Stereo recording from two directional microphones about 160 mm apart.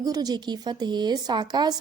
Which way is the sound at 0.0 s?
25° right (ahead or behind).